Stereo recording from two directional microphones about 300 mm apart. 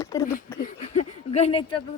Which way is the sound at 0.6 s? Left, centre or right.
Left.